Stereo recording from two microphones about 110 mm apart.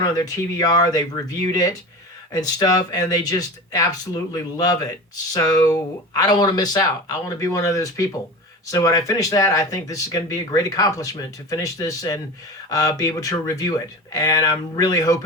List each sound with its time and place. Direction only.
0.0 s speech: 35° left (ahead or behind)